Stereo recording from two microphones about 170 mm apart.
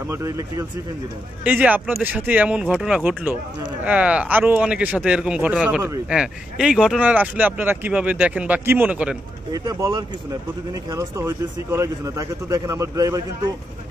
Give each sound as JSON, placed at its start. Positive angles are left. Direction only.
{"t": 0.1, "sound": "speech", "side_deg": -20}